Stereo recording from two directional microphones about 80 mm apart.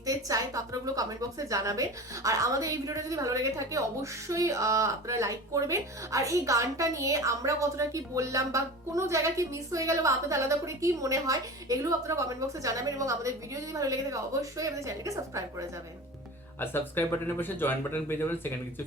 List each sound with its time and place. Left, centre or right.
0.0 s a woman's voice: right
16.6 s speech: left